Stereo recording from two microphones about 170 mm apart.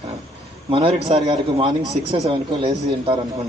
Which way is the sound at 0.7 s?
30° right (ahead or behind).